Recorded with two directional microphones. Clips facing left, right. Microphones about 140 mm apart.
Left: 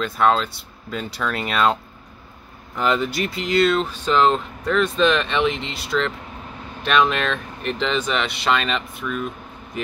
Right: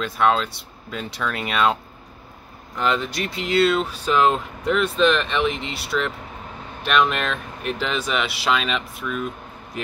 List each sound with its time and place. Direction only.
0.0 s speech: centre (ahead or behind)